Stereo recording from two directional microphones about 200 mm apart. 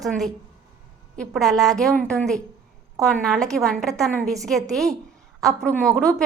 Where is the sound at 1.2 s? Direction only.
Centre (ahead or behind).